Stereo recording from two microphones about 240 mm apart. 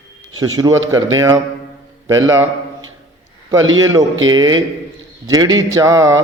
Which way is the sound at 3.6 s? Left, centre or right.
Right.